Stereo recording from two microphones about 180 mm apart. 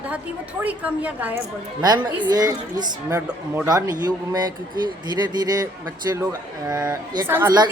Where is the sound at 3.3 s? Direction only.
10° right (ahead or behind).